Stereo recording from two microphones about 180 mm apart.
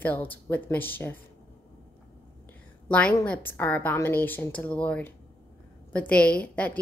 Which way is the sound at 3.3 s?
10° left (ahead or behind).